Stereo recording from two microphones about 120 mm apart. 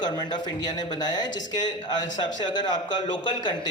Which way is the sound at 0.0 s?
35° left (ahead or behind).